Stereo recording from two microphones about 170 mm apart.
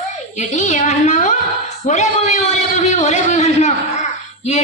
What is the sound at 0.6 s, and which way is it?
A man's voice, 45° left (ahead or behind).